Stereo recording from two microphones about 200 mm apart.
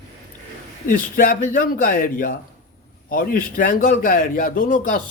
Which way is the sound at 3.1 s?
45° left (ahead or behind).